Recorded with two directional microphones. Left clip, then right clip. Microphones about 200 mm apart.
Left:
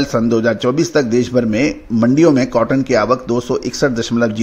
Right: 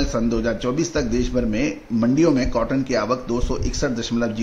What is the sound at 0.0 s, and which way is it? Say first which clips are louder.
A man's voice: left 7 dB; 35° left (ahead or behind).